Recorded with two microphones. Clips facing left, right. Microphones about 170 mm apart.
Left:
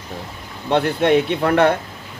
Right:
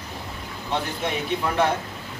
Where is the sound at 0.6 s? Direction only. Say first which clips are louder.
Left 11 dB; 65° left (ahead or behind).